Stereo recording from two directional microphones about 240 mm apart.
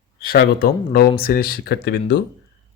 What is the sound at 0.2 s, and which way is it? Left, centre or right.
A man's voice, left.